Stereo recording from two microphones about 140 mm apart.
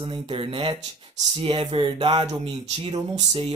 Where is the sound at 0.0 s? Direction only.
40° right (ahead or behind).